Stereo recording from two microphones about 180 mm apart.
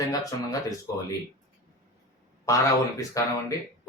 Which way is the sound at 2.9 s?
20° left (ahead or behind).